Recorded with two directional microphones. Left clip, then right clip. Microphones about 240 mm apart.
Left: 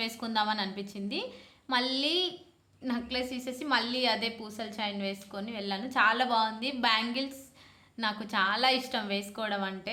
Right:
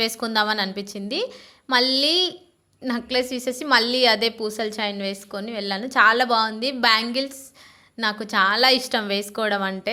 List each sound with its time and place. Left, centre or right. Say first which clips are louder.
0.0 s a woman's voice: right 9 dB; right